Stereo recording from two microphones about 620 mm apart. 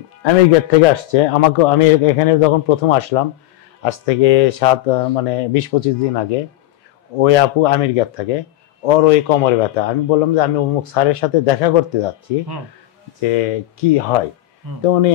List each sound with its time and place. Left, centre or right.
0.2 s a man's voice: left
7.2 s a man's voice: left
13.3 s a man's voice: left